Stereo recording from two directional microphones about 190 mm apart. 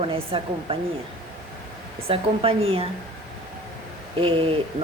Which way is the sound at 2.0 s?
30° right (ahead or behind).